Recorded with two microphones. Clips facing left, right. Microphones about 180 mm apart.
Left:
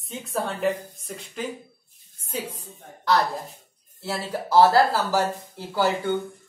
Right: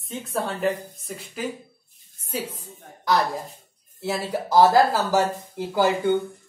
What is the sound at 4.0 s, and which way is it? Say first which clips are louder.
Speech: right 3 dB; 15° right (ahead or behind).